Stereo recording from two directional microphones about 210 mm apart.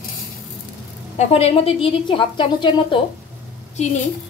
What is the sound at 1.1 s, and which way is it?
A woman's voice, 30° left (ahead or behind).